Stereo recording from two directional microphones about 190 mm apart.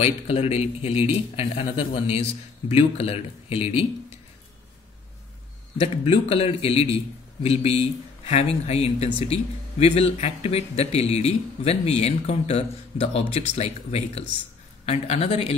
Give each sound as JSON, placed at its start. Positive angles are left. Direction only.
{"t": 0.0, "sound": "speech", "side_deg": 30}
{"t": 5.8, "sound": "speech", "side_deg": 30}